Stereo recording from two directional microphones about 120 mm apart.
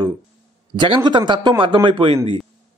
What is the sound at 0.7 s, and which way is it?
A man's voice, 40° right (ahead or behind).